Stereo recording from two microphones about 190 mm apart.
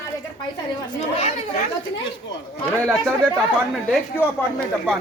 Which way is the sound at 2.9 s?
Centre (ahead or behind).